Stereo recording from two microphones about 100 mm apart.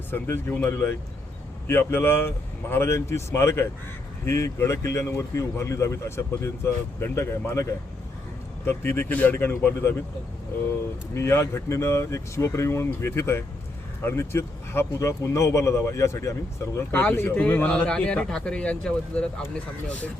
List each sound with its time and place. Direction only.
0.1 s a man's voice: 20° left (ahead or behind)
11.1 s a man's voice: 25° left (ahead or behind)
16.7 s a man's voice: 15° left (ahead or behind)